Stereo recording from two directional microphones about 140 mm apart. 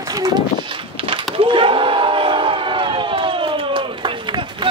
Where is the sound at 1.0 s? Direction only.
40° right (ahead or behind).